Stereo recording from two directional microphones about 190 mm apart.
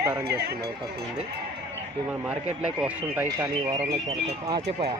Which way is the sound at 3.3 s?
20° right (ahead or behind).